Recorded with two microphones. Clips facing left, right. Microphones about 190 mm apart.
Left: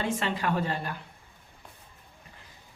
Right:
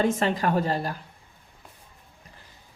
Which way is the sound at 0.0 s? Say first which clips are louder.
Right 6 dB; 40° right (ahead or behind).